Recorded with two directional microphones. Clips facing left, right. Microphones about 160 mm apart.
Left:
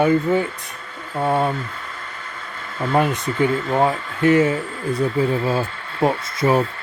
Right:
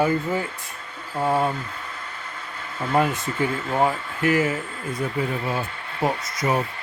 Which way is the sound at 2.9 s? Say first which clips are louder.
Left 2 dB; 20° left (ahead or behind).